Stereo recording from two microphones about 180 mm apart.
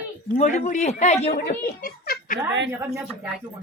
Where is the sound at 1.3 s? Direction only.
55° left (ahead or behind).